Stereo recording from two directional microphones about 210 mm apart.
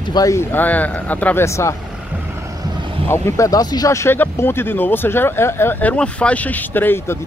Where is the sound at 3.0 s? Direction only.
10° left (ahead or behind).